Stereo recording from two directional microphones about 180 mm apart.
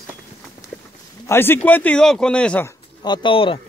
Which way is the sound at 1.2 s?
15° left (ahead or behind).